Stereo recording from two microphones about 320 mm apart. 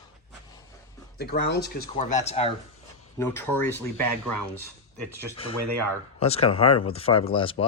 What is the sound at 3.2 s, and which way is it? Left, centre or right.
Speech, centre.